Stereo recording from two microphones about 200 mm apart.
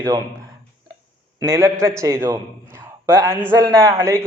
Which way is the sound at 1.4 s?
15° right (ahead or behind).